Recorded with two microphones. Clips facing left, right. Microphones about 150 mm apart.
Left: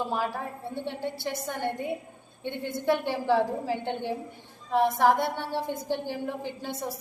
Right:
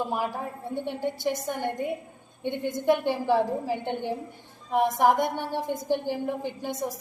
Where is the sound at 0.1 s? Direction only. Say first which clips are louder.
Right 1 dB; 15° right (ahead or behind).